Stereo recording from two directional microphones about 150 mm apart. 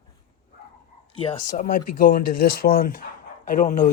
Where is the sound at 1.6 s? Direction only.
60° left (ahead or behind).